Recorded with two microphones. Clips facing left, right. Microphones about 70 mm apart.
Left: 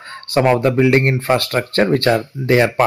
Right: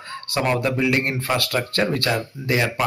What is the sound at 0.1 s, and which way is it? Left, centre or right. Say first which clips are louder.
Speech: left 8 dB; left.